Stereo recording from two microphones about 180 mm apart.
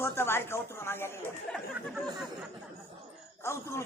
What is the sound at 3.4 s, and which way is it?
Speech, 15° left (ahead or behind).